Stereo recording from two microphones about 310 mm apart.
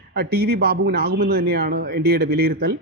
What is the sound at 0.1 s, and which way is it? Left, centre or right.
A man's voice, right.